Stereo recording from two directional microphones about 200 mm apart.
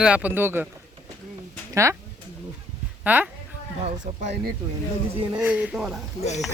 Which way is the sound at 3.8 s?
35° right (ahead or behind).